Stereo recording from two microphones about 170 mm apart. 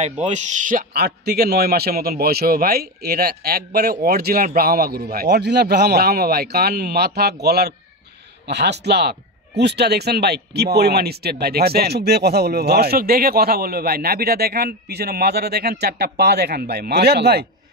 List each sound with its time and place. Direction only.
0.0 s a man's voice: 45° right (ahead or behind); by 17.5 s 70° right (ahead or behind)